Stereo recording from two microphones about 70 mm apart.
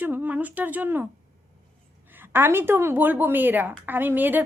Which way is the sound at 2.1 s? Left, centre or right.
Right.